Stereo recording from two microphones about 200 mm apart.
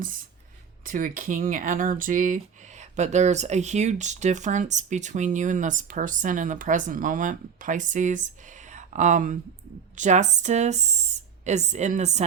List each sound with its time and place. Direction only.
0.9 s speech: 40° right (ahead or behind)